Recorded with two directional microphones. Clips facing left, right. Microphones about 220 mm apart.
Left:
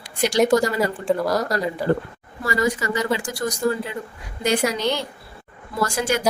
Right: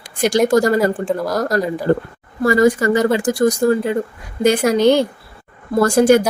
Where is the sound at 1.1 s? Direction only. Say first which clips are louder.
Right 1 dB; centre (ahead or behind).